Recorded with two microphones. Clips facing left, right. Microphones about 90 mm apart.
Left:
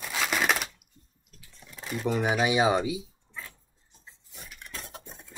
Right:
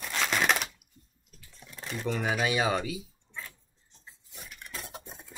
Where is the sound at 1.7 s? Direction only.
Centre (ahead or behind).